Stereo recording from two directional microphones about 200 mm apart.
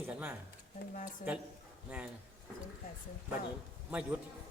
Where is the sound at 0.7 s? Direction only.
45° left (ahead or behind).